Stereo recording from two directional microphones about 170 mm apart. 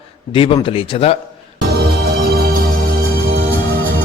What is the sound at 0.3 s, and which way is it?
Speech, 30° left (ahead or behind).